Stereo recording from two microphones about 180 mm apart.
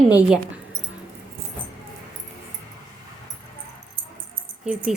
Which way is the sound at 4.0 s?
50° right (ahead or behind).